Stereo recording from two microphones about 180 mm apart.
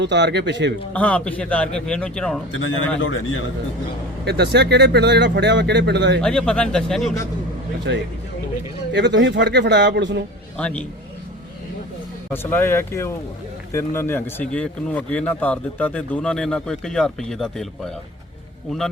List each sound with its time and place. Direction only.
0.0 s speech: 75° right (ahead or behind)
0.9 s a man's voice: 5° left (ahead or behind)
2.5 s a man's voice: 90° left
4.3 s speech: 65° right (ahead or behind)
6.2 s a man's voice: 5° left (ahead or behind)
8.9 s speech: 75° right (ahead or behind)
10.6 s a man's voice: 5° left (ahead or behind)
12.3 s speech: 10° left (ahead or behind)